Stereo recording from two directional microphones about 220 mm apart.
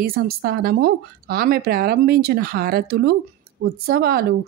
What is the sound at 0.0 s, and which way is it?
Speech, 45° right (ahead or behind).